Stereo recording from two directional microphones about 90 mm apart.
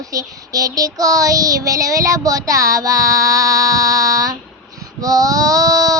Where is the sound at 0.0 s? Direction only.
40° right (ahead or behind).